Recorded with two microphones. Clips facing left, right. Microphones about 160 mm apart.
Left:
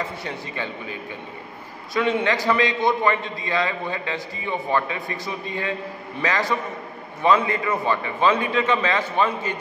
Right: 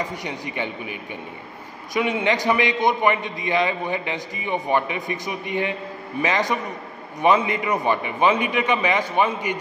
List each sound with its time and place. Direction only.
0.0 s a man's voice: 15° right (ahead or behind)
2.0 s a man's voice: 15° right (ahead or behind)